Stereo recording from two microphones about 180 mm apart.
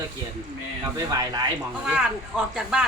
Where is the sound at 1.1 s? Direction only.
20° right (ahead or behind).